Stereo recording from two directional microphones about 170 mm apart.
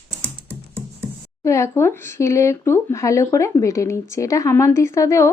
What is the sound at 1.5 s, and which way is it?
Speech, 15° left (ahead or behind).